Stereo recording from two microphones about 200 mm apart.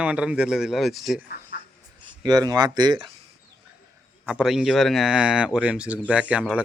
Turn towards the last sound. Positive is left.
turn(degrees=-5)  # may be behind; listen again after turning